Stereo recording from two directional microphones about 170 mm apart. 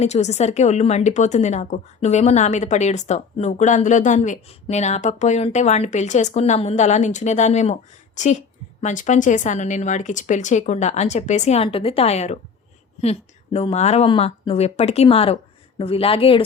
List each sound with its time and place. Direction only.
0.0 s a woman's voice: 40° left (ahead or behind)